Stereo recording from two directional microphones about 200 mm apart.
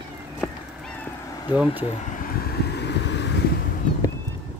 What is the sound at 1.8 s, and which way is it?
Vehicle, 35° left (ahead or behind).